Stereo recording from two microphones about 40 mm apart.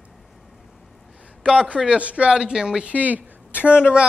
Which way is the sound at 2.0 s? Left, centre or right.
Right.